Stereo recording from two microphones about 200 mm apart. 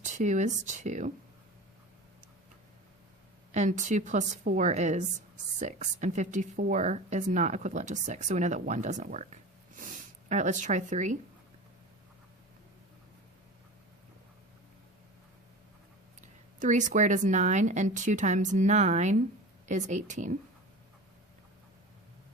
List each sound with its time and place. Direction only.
0.0 s speech: 40° right (ahead or behind)
3.5 s speech: 35° right (ahead or behind)
16.2 s speech: 40° right (ahead or behind)